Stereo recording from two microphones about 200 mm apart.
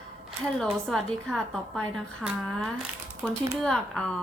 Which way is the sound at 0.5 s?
Centre (ahead or behind).